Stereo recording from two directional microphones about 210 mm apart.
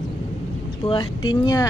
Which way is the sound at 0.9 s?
20° left (ahead or behind).